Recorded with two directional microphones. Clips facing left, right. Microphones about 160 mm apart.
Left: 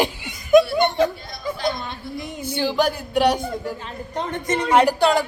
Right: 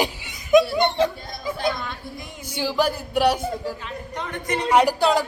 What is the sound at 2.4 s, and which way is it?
Speech, 10° right (ahead or behind).